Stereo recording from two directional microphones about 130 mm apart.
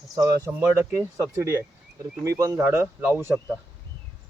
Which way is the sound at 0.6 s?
15° right (ahead or behind).